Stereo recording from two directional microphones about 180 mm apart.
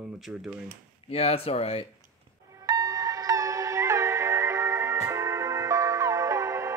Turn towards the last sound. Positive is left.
turn(degrees=-15)  # may be behind; listen again after turning